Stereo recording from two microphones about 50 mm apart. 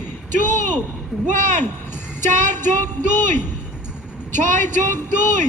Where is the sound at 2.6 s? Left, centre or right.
Left.